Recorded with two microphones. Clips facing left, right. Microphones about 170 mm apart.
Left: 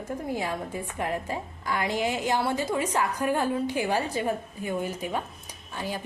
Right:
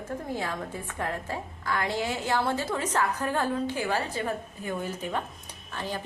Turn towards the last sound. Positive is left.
turn(degrees=10)  # may be behind; listen again after turning